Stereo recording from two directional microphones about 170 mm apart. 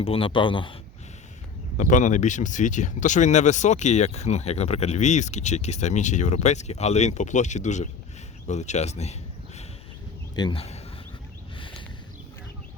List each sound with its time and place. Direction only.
0.0 s speech: 35° left (ahead or behind)
1.8 s speech: 45° left (ahead or behind)
10.3 s speech: 30° left (ahead or behind)
11.5 s a sound: 30° left (ahead or behind)